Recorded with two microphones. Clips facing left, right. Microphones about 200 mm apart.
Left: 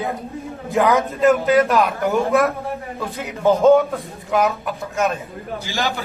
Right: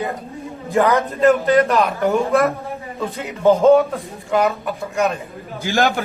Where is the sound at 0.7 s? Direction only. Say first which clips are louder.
Right 1 dB; centre (ahead or behind).